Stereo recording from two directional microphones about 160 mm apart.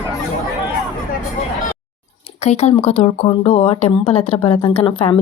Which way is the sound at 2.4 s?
45° left (ahead or behind).